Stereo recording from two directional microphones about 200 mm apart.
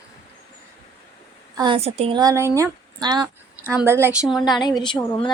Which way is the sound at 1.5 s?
25° right (ahead or behind).